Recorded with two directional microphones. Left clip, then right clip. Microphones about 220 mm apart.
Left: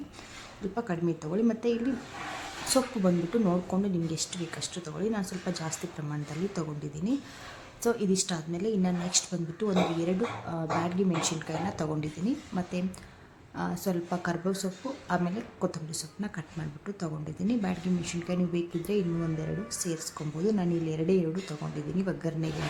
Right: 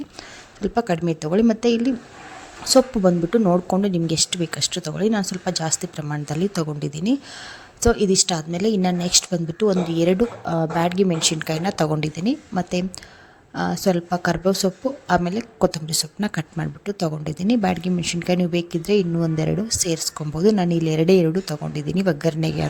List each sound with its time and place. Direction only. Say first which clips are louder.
0.6 s a woman's voice: right 11 dB; 35° right (ahead or behind)